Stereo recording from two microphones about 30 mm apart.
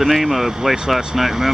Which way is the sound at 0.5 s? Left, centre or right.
Right.